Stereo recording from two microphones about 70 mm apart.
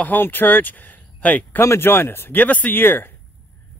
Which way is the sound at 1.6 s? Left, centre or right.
Left.